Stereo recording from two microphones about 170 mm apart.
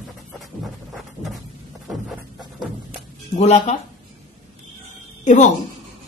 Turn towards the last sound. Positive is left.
turn(degrees=45)  # may be behind; listen again after turning